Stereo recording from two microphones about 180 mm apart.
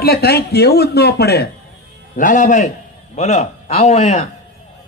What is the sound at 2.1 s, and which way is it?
A man's voice, 45° left (ahead or behind).